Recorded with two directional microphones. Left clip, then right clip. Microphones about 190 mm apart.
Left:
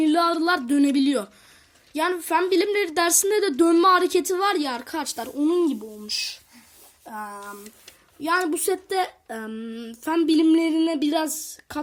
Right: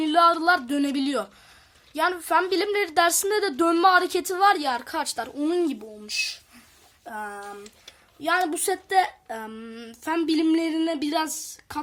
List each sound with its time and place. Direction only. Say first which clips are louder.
0.0 s a woman's voice: right 2 dB; centre (ahead or behind)